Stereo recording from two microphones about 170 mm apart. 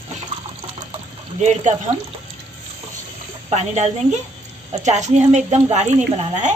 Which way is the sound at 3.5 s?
40° right (ahead or behind).